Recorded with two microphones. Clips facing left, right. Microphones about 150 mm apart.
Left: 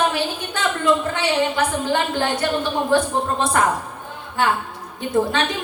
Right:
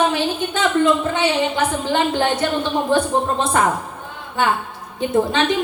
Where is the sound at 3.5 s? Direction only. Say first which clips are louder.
Right 1 dB; 20° right (ahead or behind).